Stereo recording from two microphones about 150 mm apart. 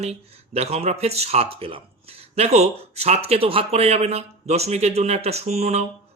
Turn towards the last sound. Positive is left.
turn(degrees=-45)  # may be behind; listen again after turning